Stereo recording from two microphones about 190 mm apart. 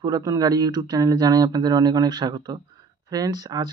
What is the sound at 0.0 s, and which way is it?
Speech, 20° right (ahead or behind).